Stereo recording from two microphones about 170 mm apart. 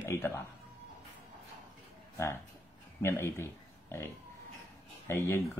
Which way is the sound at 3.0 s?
15° left (ahead or behind).